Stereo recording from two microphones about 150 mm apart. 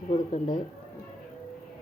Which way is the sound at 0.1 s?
25° left (ahead or behind).